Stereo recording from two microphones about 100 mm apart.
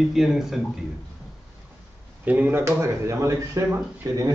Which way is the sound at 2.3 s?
15° right (ahead or behind).